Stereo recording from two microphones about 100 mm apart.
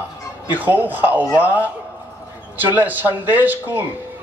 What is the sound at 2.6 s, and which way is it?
A man's voice, 20° right (ahead or behind).